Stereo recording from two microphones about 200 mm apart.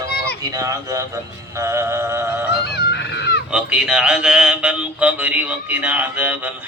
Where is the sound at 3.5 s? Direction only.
5° right (ahead or behind).